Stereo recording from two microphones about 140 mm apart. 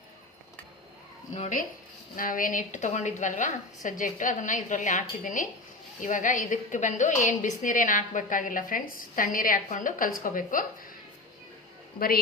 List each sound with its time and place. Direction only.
1.4 s a woman's voice: 65° left (ahead or behind)
2.1 s a woman's voice: 75° left (ahead or behind)
11.9 s a woman's voice: 90° left